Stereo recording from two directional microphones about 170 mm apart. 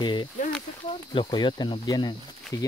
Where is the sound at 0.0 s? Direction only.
25° left (ahead or behind).